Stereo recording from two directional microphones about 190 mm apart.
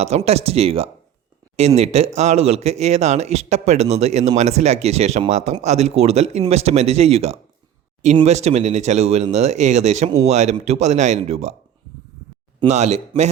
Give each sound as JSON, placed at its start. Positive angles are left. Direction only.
{"t": 0.0, "sound": "a man's voice", "side_deg": -35}
{"t": 12.5, "sound": "a man's voice", "side_deg": -35}